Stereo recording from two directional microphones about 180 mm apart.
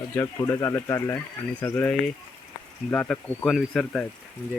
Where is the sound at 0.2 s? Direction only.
15° left (ahead or behind).